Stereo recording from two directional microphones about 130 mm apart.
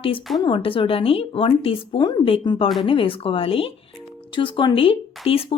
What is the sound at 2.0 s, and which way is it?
Speech, 35° left (ahead or behind).